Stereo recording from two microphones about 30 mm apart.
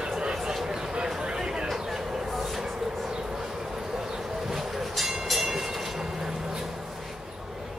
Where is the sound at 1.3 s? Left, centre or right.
Right.